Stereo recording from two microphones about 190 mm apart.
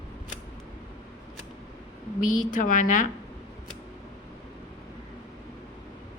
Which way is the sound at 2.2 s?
45° left (ahead or behind).